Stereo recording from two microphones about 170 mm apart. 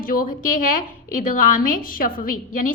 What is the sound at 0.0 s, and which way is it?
A woman's voice, 55° left (ahead or behind).